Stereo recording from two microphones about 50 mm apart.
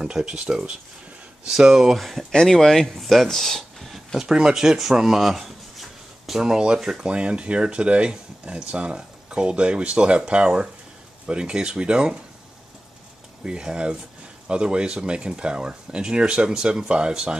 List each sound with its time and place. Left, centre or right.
0.0 s speech: centre
2.0 s speech: centre
2.3 s speech: centre
4.2 s speech: centre
13.4 s speech: centre